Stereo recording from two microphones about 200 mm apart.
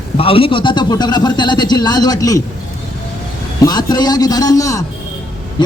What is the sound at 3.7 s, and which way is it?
A man's voice, 20° left (ahead or behind).